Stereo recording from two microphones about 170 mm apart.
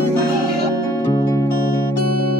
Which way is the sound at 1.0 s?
20° left (ahead or behind).